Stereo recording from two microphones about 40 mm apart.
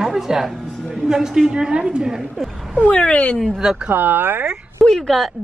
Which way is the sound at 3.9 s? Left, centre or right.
Right.